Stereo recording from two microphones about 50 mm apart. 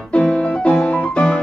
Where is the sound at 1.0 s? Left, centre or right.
Left.